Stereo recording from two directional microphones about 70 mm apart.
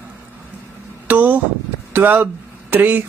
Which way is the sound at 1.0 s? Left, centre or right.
Right.